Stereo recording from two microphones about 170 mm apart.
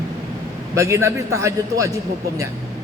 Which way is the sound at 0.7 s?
15° right (ahead or behind).